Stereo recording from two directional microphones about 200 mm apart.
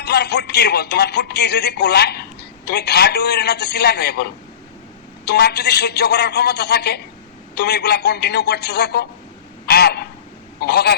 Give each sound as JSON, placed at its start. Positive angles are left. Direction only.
{"t": 0.0, "sound": "speech", "side_deg": 55}
{"t": 9.6, "sound": "a sound", "side_deg": 50}
{"t": 10.6, "sound": "speech", "side_deg": 55}